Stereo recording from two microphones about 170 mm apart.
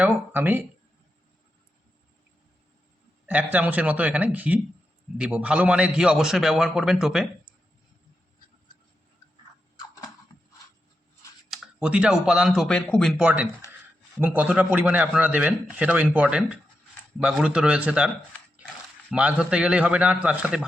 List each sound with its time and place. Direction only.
0.0 s speech: 10° right (ahead or behind)
3.2 s a man's voice: 10° right (ahead or behind)
9.7 s a sound: 20° left (ahead or behind)
11.5 s a man's voice: 5° right (ahead or behind)
13.2 s speech: 10° right (ahead or behind)
19.1 s a man's voice: 5° right (ahead or behind)